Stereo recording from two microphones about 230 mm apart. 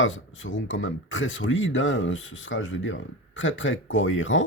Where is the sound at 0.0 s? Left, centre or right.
Left.